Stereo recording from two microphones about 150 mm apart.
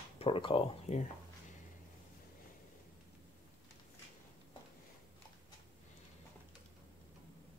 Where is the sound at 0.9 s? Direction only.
50° left (ahead or behind).